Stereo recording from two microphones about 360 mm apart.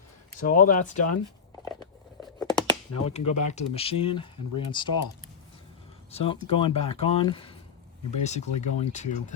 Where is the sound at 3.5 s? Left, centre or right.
Centre.